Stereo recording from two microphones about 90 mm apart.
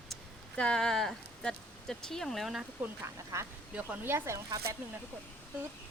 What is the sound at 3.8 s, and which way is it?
Speech, 20° right (ahead or behind).